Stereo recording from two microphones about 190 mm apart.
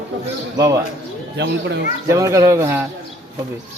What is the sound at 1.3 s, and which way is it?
Speech, 65° right (ahead or behind).